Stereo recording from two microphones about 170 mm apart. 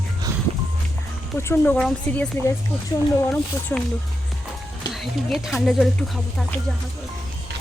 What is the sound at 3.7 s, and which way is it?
Speech, 5° left (ahead or behind).